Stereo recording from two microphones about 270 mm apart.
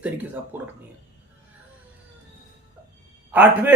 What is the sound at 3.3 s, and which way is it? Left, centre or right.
Speech, centre.